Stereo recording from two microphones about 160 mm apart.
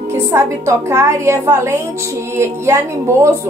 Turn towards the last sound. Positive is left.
turn(degrees=-15)  # may be behind; listen again after turning